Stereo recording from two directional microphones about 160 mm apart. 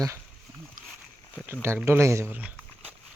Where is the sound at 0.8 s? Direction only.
60° right (ahead or behind).